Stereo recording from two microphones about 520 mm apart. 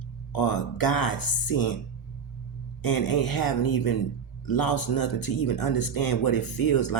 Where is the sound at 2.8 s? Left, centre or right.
Left.